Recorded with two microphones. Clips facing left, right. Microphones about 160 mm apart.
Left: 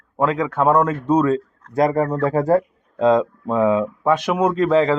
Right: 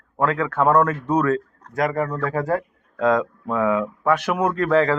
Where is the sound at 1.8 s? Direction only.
30° left (ahead or behind).